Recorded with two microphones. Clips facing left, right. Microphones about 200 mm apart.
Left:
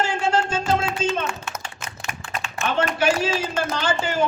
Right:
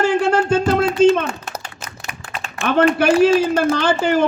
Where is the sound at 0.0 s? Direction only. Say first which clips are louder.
Right 6 dB; 60° right (ahead or behind).